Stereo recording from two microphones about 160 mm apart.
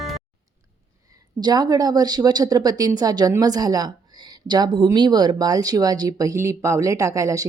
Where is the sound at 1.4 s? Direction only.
25° right (ahead or behind).